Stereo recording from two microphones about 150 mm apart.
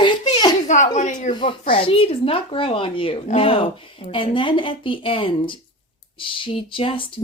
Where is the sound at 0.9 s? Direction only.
55° left (ahead or behind).